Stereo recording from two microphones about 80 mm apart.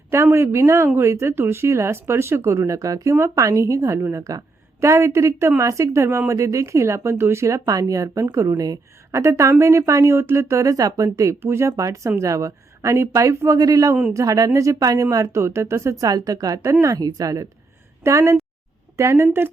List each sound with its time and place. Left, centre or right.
0.1 s speech: right
9.2 s speech: right